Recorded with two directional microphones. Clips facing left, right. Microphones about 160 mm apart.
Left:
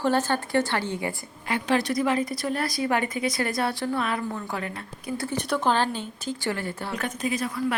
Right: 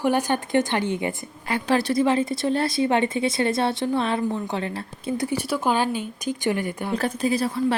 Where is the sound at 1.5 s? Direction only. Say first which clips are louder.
Right 2 dB; 35° right (ahead or behind).